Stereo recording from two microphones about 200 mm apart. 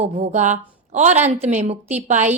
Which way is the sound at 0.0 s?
35° right (ahead or behind).